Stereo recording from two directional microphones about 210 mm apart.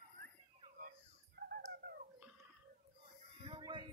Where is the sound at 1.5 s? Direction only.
45° right (ahead or behind).